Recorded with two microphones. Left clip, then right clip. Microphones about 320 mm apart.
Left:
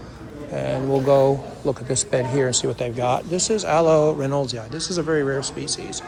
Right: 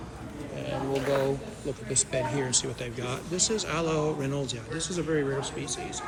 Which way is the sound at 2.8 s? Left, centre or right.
Centre.